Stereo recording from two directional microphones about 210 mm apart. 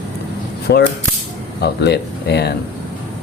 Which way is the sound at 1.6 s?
55° left (ahead or behind).